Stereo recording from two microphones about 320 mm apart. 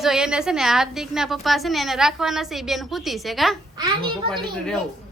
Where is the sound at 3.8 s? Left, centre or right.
Centre.